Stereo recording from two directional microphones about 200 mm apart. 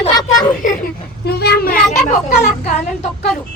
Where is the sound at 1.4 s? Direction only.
50° left (ahead or behind).